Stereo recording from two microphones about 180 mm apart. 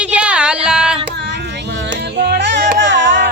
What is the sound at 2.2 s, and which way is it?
Music, 70° right (ahead or behind).